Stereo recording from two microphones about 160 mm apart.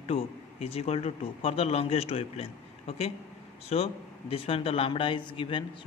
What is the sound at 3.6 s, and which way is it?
Speech, 40° left (ahead or behind).